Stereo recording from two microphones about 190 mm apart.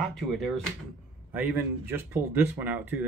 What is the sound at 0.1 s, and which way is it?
Speech, centre (ahead or behind).